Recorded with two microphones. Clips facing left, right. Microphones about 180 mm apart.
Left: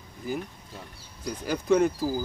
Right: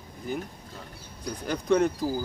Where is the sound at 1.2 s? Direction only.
5° left (ahead or behind).